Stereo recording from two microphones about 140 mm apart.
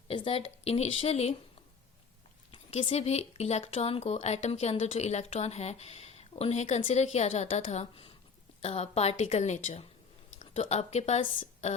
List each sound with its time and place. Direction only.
0.1 s speech: 40° left (ahead or behind)
2.5 s speech: 40° left (ahead or behind)